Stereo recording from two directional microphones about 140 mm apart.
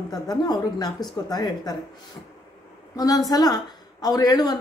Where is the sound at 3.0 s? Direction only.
25° left (ahead or behind).